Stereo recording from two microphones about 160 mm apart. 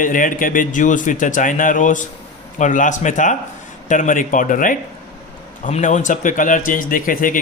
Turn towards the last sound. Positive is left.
turn(degrees=60)  # may be behind; listen again after turning